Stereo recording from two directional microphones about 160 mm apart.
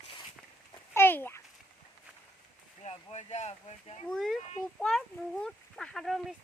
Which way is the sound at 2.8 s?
40° left (ahead or behind).